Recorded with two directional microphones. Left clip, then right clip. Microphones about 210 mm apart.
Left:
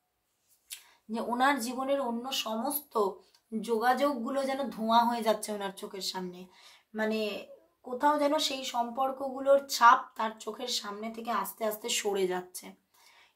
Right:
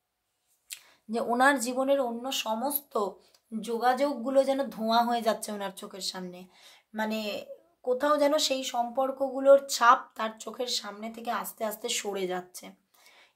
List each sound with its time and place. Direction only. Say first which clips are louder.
0.7 s speech: right 2 dB; 25° right (ahead or behind)